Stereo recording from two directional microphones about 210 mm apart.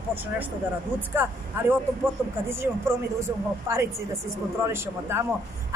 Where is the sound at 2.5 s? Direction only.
10° right (ahead or behind).